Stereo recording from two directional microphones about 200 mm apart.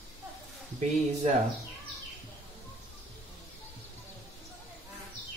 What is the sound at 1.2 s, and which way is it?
Speech, 35° right (ahead or behind).